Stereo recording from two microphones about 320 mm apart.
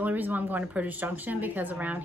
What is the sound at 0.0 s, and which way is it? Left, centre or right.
Speech, centre.